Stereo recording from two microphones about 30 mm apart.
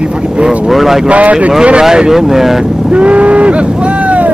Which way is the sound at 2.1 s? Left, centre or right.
Centre.